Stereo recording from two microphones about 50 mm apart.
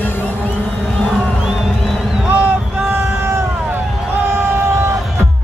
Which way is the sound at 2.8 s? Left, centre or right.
Right.